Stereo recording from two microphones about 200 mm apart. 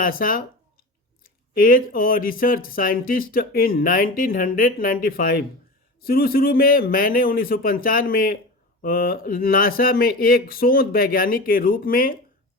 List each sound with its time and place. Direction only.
0.0 s speech: 45° left (ahead or behind)
1.5 s speech: 45° left (ahead or behind)